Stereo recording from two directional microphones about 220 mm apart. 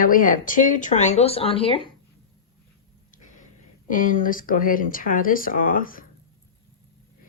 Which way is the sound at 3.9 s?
35° left (ahead or behind).